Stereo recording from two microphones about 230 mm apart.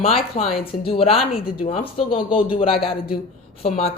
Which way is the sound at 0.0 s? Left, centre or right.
Left.